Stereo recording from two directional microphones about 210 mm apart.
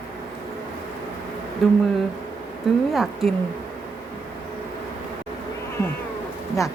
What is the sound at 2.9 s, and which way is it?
Speech, centre (ahead or behind).